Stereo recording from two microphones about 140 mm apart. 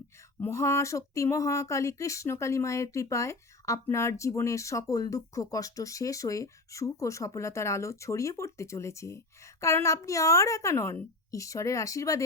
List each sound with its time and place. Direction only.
0.3 s speech: 20° left (ahead or behind)